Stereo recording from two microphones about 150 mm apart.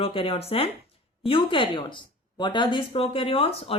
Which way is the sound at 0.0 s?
40° left (ahead or behind).